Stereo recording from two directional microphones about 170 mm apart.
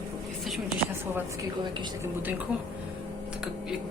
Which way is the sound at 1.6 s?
25° right (ahead or behind).